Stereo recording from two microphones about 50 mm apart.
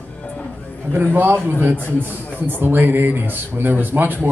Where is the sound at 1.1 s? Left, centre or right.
Right.